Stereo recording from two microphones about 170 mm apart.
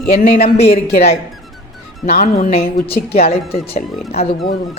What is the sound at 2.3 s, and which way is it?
Speech, 40° left (ahead or behind).